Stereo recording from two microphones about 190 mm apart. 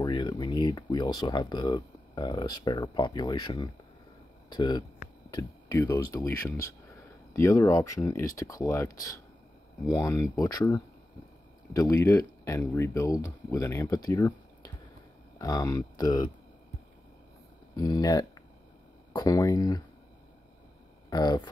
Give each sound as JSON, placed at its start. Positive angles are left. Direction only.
{"t": 0.0, "sound": "speech", "side_deg": 25}
{"t": 15.3, "sound": "speech", "side_deg": 20}
{"t": 17.7, "sound": "speech", "side_deg": 20}
{"t": 21.1, "sound": "speech", "side_deg": 20}